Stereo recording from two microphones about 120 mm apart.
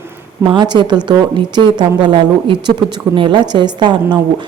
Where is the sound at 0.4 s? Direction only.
40° right (ahead or behind).